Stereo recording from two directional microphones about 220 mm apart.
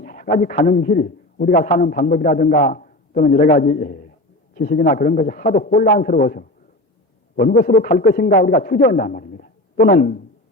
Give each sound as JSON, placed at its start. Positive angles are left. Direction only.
{"t": 0.0, "sound": "a man's voice", "side_deg": 35}